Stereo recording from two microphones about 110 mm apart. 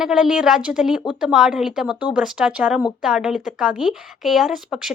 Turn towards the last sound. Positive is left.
turn(degrees=0)  # may be behind; listen again after turning